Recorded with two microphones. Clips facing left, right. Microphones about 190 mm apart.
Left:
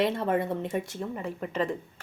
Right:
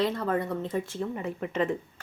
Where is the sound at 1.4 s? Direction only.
35° left (ahead or behind).